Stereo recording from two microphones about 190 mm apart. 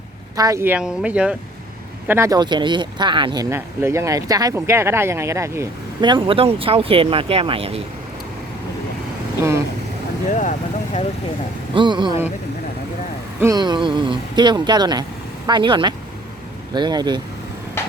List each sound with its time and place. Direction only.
0.3 s speech: 15° right (ahead or behind)
3.5 s speech: 15° right (ahead or behind); by 7.8 s 30° right (ahead or behind)
10.2 s speech: 40° left (ahead or behind)
11.7 s speech: 25° right (ahead or behind)
13.4 s speech: 20° right (ahead or behind)